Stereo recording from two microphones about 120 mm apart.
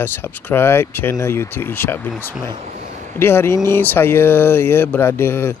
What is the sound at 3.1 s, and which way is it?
Speech, 20° left (ahead or behind).